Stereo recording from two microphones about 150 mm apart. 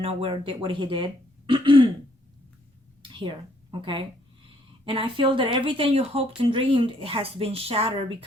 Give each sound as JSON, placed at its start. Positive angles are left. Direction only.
{"t": 0.0, "sound": "speech", "side_deg": -40}
{"t": 3.0, "sound": "a woman's voice", "side_deg": -30}